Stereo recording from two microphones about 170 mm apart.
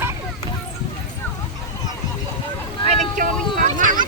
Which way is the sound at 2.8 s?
50° right (ahead or behind).